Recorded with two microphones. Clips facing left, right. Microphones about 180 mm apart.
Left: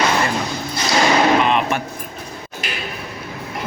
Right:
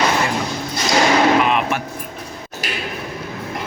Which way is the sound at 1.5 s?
5° right (ahead or behind).